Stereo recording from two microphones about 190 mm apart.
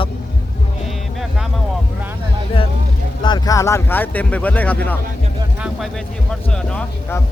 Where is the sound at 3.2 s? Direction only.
20° left (ahead or behind).